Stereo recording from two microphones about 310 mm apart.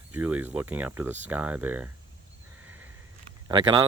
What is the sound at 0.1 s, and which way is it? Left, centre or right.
Speech, centre.